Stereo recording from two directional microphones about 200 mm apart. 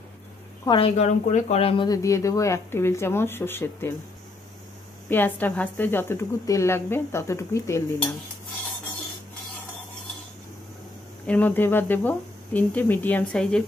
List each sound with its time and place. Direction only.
0.7 s speech: 30° left (ahead or behind); by 3.9 s 10° left (ahead or behind)
5.1 s speech: 10° left (ahead or behind)
11.2 s speech: 10° left (ahead or behind)